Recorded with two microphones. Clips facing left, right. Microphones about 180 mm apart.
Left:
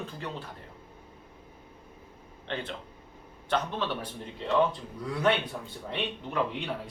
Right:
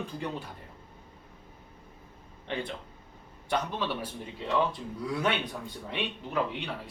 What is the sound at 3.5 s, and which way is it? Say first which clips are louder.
Speech: left 1 dB; 10° right (ahead or behind).